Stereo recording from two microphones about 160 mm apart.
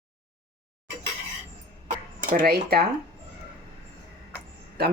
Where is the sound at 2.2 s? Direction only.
60° right (ahead or behind).